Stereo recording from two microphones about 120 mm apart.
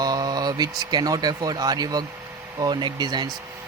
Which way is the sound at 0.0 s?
35° right (ahead or behind).